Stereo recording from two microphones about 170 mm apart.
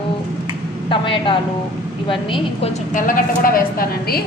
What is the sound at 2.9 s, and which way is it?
A woman's voice, 55° left (ahead or behind).